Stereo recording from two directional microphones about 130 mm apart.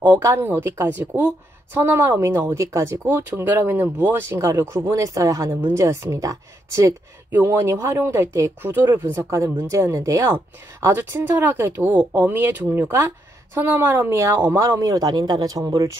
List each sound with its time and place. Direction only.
0.0 s a woman's voice: 15° right (ahead or behind)